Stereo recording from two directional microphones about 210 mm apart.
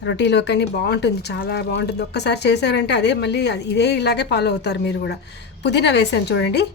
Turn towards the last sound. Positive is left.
turn(degrees=50)  # may be behind; listen again after turning